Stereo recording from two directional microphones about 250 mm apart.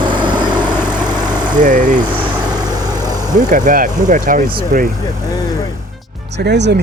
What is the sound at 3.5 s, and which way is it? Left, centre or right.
Speech, right.